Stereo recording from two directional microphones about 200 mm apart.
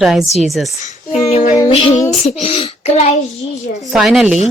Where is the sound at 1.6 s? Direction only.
25° left (ahead or behind).